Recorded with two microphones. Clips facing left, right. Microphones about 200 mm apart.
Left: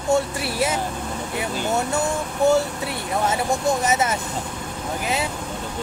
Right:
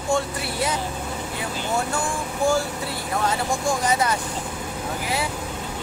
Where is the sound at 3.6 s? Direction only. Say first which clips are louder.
Even; 20° left (ahead or behind).